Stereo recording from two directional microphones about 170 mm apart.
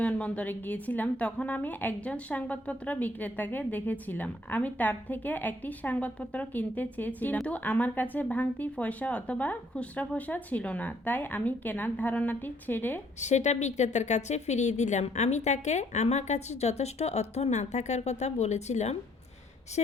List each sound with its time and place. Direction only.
0.0 s a woman's voice: 10° left (ahead or behind)
13.1 s speech: 45° left (ahead or behind)